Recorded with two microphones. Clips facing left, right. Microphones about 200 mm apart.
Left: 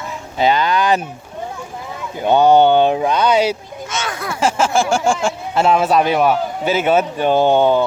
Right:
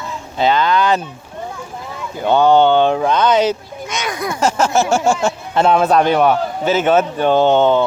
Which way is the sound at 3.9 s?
15° right (ahead or behind).